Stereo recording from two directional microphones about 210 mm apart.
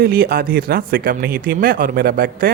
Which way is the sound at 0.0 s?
45° right (ahead or behind).